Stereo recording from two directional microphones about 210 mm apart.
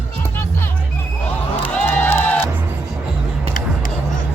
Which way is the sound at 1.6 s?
10° left (ahead or behind).